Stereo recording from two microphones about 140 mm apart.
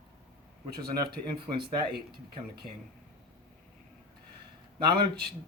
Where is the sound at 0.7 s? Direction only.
30° right (ahead or behind).